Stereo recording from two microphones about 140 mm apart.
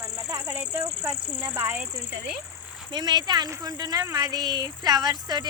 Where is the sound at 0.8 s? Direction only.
35° right (ahead or behind).